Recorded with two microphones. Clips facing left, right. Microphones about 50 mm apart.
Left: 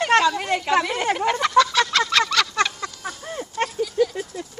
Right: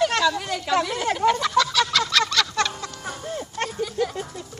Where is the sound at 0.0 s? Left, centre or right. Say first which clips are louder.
Left 3 dB; left.